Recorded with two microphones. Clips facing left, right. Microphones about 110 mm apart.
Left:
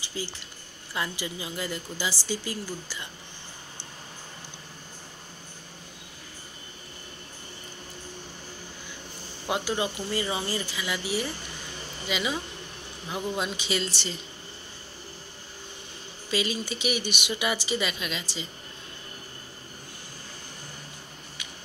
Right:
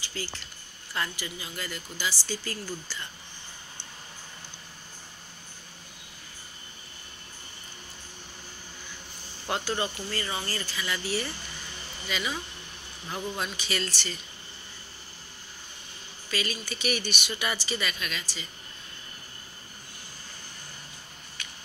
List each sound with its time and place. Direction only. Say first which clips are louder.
0.0 s a sound: left 2 dB; 20° left (ahead or behind)
0.9 s speech: left 2 dB; 20° left (ahead or behind)
9.5 s speech: left 2 dB; 15° left (ahead or behind)
16.3 s speech: left 4 dB; 20° left (ahead or behind)